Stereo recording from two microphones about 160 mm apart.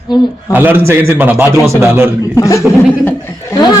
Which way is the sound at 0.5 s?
10° right (ahead or behind).